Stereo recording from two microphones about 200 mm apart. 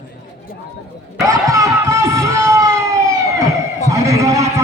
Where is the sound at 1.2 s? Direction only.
15° right (ahead or behind).